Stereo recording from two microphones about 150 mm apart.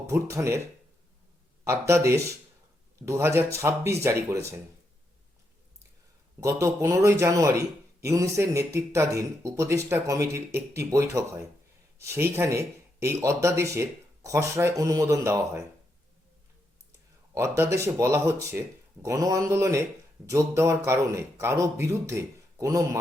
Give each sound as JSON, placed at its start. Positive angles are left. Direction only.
{"t": 0.1, "sound": "speech", "side_deg": -20}
{"t": 1.6, "sound": "speech", "side_deg": -20}
{"t": 6.4, "sound": "speech", "side_deg": -20}
{"t": 17.3, "sound": "speech", "side_deg": -15}